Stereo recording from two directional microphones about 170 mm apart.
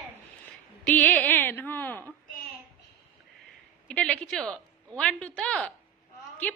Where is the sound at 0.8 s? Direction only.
10° left (ahead or behind).